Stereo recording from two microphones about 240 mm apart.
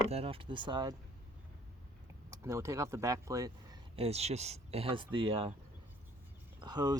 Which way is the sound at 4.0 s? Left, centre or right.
Right.